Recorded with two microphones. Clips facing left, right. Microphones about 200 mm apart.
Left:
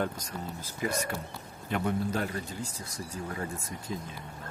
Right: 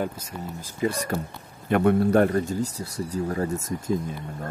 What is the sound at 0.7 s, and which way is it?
Speech, 35° right (ahead or behind).